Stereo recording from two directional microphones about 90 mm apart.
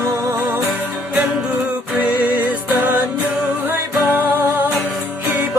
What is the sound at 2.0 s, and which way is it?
Music, 20° right (ahead or behind).